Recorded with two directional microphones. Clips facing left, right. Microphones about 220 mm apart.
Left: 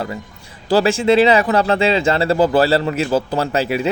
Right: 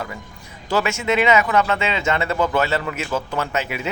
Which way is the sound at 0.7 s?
30° left (ahead or behind).